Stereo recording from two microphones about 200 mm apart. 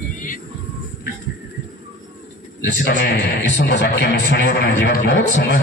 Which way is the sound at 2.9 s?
60° left (ahead or behind).